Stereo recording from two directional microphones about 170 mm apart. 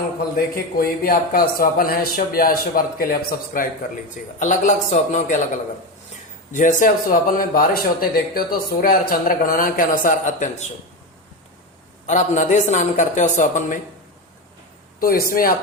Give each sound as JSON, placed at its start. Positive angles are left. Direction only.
{"t": 0.3, "sound": "speech", "side_deg": 60}
{"t": 4.4, "sound": "a woman's voice", "side_deg": 45}
{"t": 6.5, "sound": "speech", "side_deg": 50}
{"t": 12.0, "sound": "a woman's voice", "side_deg": 45}
{"t": 15.0, "sound": "speech", "side_deg": 60}